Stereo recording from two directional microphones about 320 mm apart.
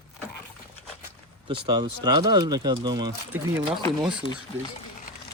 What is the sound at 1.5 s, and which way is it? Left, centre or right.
Speech, centre.